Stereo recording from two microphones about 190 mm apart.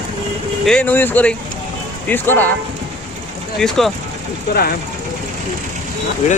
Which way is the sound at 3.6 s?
Centre (ahead or behind).